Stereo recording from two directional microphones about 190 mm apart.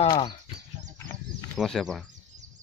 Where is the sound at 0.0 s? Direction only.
25° left (ahead or behind).